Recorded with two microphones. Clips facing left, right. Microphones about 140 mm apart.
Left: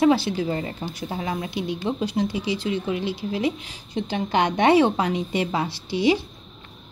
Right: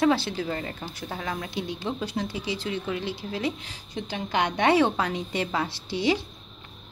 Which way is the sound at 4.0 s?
25° left (ahead or behind).